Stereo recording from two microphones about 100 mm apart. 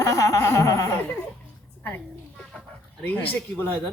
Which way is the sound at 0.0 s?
30° left (ahead or behind).